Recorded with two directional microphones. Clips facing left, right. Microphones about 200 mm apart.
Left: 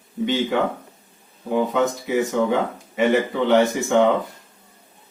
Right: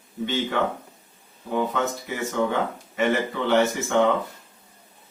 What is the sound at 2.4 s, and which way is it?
Speech, 15° left (ahead or behind).